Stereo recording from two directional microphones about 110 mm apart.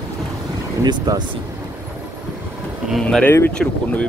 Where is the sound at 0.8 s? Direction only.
40° right (ahead or behind).